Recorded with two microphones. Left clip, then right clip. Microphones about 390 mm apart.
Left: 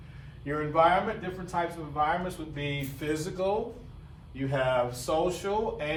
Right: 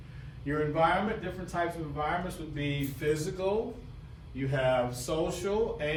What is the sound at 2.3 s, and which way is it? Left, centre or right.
A man's voice, centre.